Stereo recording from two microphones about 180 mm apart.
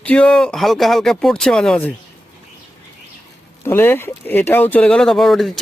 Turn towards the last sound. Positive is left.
turn(degrees=0)  # may be behind; listen again after turning